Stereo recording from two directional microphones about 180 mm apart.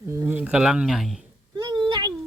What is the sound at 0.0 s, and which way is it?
Speech, 15° right (ahead or behind).